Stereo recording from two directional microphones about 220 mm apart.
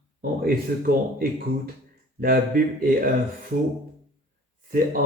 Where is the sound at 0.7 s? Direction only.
40° right (ahead or behind).